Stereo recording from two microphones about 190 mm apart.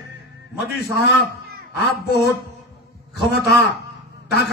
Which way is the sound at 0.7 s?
60° left (ahead or behind).